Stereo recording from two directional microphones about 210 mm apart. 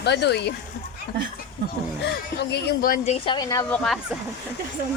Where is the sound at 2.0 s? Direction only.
55° left (ahead or behind).